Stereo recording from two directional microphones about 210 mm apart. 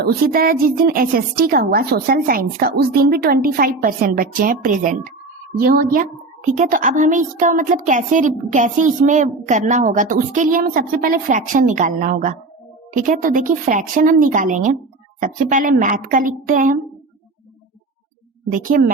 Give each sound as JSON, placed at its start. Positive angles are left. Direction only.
{"t": 0.0, "sound": "a woman's voice", "side_deg": -45}
{"t": 18.5, "sound": "a woman's voice", "side_deg": -40}